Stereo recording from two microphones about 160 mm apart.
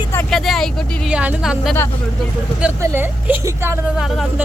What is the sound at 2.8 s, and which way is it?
Speech, 15° right (ahead or behind).